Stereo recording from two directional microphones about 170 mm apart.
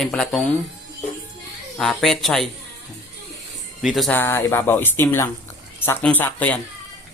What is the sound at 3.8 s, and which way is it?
Speech, centre (ahead or behind).